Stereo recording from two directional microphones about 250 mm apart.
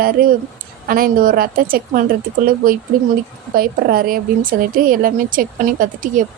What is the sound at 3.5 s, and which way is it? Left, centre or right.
A woman's voice, right.